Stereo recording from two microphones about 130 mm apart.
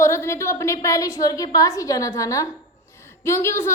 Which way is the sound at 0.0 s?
20° left (ahead or behind).